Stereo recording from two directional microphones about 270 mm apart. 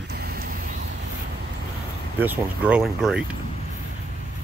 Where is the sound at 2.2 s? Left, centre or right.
Centre.